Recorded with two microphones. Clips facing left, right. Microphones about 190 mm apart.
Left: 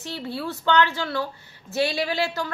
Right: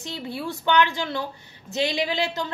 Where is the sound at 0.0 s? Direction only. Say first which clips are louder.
Left 1 dB; 15° right (ahead or behind).